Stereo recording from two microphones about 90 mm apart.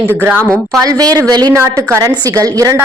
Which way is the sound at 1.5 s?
30° right (ahead or behind).